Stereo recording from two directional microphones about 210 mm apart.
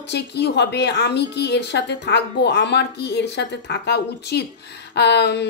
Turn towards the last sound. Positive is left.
turn(degrees=55)  # may be behind; listen again after turning